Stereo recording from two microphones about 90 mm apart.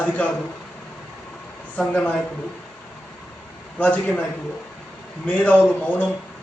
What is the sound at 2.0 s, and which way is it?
Speech, 15° left (ahead or behind).